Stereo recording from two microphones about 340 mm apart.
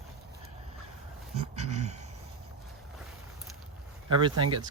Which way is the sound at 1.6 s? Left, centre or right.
Centre.